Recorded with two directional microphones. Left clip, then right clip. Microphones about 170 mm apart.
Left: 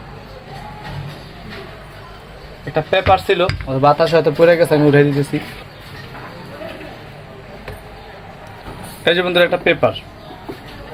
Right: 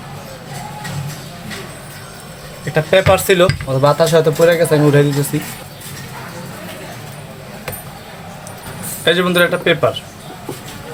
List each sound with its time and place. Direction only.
2.7 s speech: centre (ahead or behind); by 5.0 s 25° left (ahead or behind)
9.0 s speech: 25° left (ahead or behind)